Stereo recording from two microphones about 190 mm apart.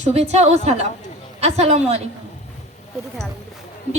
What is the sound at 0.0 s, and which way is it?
A woman's voice, 35° right (ahead or behind).